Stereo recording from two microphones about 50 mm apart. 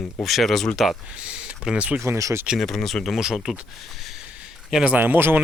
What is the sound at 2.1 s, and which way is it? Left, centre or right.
Speech, right.